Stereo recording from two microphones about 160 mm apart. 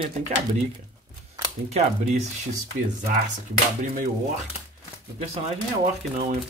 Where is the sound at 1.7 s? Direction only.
45° right (ahead or behind).